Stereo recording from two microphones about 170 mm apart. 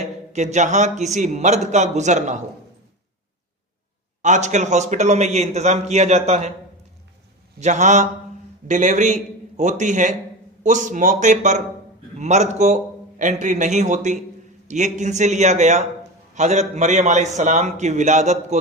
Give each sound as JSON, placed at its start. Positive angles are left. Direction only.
{"t": 0.3, "sound": "a man's voice", "side_deg": -40}
{"t": 4.2, "sound": "a man's voice", "side_deg": -45}
{"t": 7.6, "sound": "a man's voice", "side_deg": -45}